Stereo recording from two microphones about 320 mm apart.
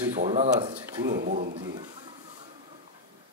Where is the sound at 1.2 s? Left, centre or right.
Right.